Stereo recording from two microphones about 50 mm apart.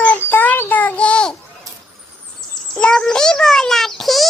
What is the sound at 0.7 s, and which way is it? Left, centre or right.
Child singing, left.